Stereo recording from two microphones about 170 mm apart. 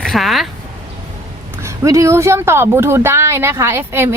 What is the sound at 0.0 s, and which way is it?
Speech, centre (ahead or behind).